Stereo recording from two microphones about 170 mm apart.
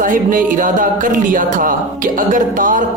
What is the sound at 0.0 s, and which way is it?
Music, 50° right (ahead or behind).